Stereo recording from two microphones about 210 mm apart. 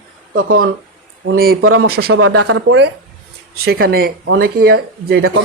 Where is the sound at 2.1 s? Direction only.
90° right.